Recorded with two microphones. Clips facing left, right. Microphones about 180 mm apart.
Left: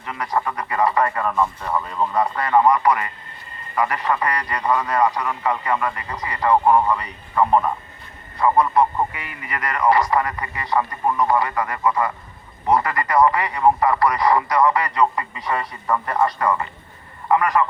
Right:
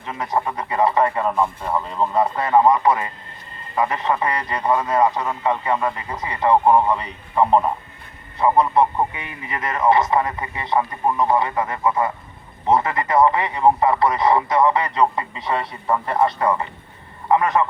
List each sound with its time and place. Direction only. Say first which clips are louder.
0.0 s a man's voice: right 1 dB; 20° right (ahead or behind)